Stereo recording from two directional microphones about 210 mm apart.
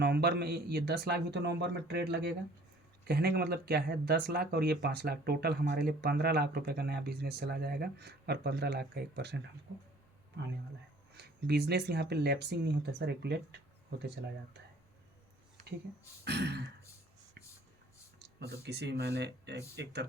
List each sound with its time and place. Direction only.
0.0 s speech: 50° right (ahead or behind)
11.1 s speech: 50° right (ahead or behind)
16.2 s speech: 55° right (ahead or behind)
18.6 s speech: 55° right (ahead or behind)